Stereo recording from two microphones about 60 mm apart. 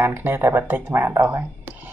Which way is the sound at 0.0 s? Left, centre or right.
Right.